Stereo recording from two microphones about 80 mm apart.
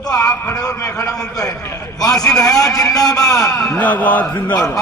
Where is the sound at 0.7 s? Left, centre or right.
Left.